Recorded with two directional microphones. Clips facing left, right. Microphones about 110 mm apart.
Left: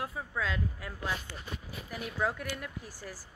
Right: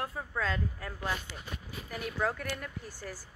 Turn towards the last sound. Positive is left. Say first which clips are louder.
# right 1 dB
turn(degrees=5)  # may be behind; listen again after turning